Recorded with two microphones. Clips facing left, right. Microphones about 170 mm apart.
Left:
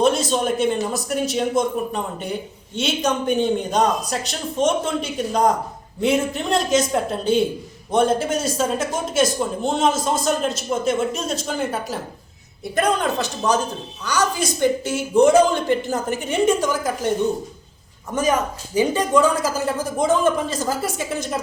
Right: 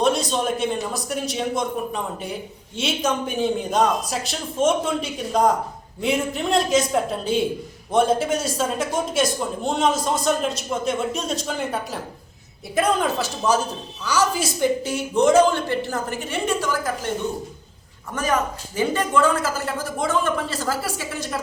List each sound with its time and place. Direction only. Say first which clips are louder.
0.0 s speech: left 2 dB; centre (ahead or behind); by 17.1 s 15° left (ahead or behind)
18.1 s a woman's voice: left 3 dB; 15° left (ahead or behind)